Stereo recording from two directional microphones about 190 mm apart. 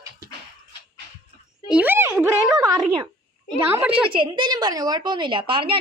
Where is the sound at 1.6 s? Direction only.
5° right (ahead or behind).